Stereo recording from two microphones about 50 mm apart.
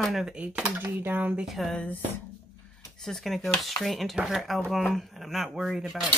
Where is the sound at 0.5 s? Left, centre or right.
Right.